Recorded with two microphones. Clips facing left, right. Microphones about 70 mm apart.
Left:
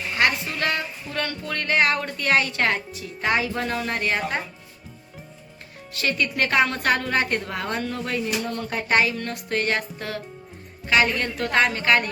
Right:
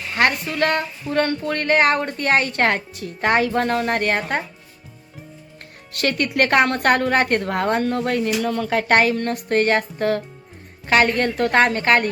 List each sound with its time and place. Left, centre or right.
0.2 s speech: right
5.9 s speech: right